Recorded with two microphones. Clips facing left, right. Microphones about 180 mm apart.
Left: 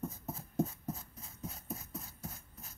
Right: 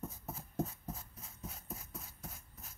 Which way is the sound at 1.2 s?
Centre (ahead or behind).